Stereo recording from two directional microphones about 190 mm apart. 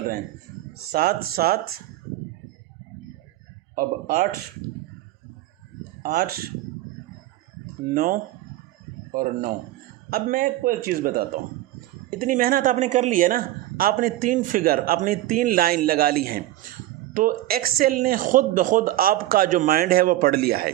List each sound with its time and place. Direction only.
0.9 s speech: 55° right (ahead or behind)
3.8 s speech: 50° right (ahead or behind)
6.0 s speech: 45° right (ahead or behind)
7.9 s speech: 45° right (ahead or behind)